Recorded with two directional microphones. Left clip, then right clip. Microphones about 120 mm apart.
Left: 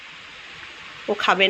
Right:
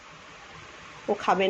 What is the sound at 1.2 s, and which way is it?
Speech, centre (ahead or behind).